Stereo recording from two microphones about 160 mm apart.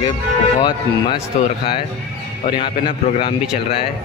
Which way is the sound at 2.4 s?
30° left (ahead or behind).